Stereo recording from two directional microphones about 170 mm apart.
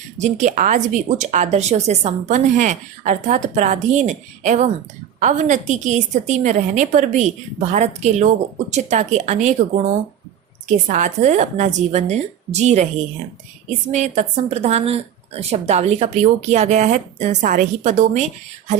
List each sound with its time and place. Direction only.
0.2 s a woman's voice: 45° right (ahead or behind)
13.9 s a woman's voice: 40° right (ahead or behind)